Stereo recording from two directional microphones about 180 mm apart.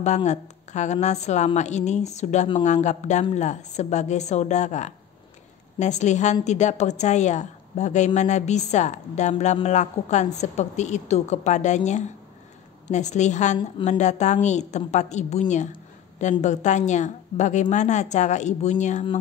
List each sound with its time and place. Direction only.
0.0 s a woman's voice: 40° left (ahead or behind)